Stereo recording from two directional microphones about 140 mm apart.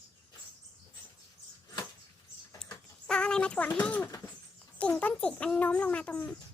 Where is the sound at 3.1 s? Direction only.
5° left (ahead or behind).